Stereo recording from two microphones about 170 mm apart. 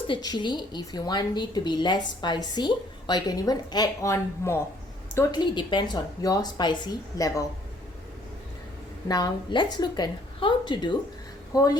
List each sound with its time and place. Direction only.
0.1 s a woman's voice: 25° left (ahead or behind)
5.4 s a woman's voice: 25° left (ahead or behind)
9.0 s a woman's voice: 25° left (ahead or behind)